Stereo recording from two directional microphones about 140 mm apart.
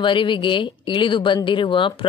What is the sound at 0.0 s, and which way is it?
Speech, 35° left (ahead or behind).